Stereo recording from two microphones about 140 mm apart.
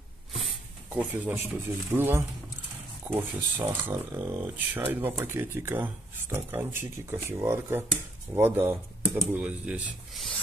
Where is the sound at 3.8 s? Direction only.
15° right (ahead or behind).